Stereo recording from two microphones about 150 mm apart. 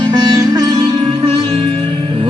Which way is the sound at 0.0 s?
30° right (ahead or behind).